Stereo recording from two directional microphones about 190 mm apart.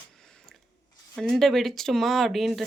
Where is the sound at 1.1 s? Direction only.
Centre (ahead or behind).